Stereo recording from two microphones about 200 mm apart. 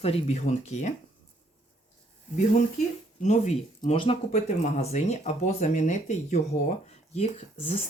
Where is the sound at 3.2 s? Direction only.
35° left (ahead or behind).